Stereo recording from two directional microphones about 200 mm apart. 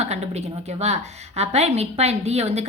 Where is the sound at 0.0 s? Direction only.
35° right (ahead or behind).